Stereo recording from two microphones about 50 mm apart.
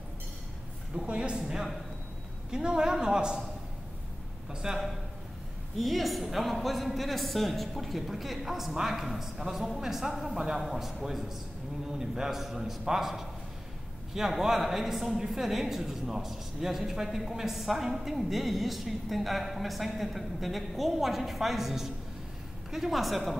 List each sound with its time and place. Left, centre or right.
0.9 s a woman's voice: right
2.5 s a man's voice: centre
4.5 s a man's voice: centre
5.8 s a woman's voice: centre